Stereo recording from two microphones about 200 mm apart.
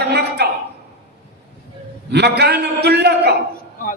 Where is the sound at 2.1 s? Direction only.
55° right (ahead or behind).